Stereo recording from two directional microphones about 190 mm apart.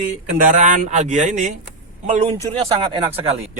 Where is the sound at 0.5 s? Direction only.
40° right (ahead or behind).